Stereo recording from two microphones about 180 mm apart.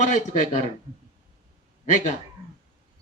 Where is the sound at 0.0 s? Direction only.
40° left (ahead or behind).